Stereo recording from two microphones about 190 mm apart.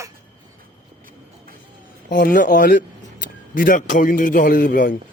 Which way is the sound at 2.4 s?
45° left (ahead or behind).